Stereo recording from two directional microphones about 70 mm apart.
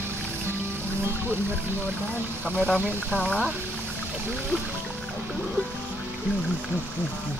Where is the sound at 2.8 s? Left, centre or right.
Right.